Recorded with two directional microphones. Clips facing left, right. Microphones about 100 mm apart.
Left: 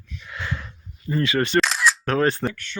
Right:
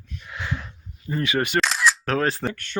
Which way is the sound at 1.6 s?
Centre (ahead or behind).